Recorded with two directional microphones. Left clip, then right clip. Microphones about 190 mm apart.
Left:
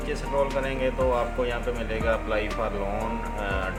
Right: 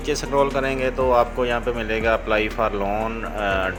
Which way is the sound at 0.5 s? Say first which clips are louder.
Right 4 dB; 55° right (ahead or behind).